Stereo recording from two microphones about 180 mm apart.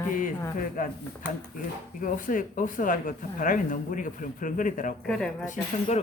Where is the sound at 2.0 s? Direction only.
50° left (ahead or behind).